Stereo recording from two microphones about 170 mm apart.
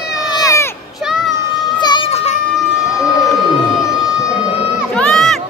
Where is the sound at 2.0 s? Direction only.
40° left (ahead or behind).